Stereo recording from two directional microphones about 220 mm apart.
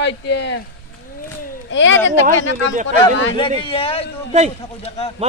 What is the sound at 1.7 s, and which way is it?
Speech, 55° left (ahead or behind).